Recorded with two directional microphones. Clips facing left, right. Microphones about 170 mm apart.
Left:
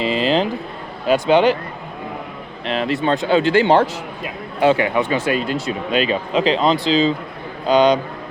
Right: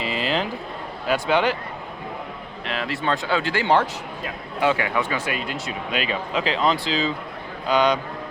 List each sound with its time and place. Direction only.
0.0 s a sound: 25° left (ahead or behind)
1.0 s speech: 20° left (ahead or behind)
2.6 s speech: 25° left (ahead or behind)